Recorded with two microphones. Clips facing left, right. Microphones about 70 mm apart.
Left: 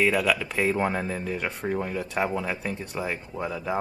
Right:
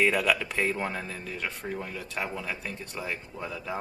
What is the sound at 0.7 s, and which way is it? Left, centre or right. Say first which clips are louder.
Speech: left 7 dB; centre.